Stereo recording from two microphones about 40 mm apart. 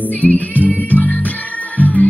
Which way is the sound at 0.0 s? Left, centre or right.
Left.